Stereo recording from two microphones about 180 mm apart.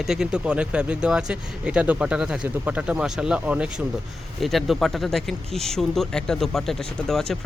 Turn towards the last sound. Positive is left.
turn(degrees=0)  # may be behind; listen again after turning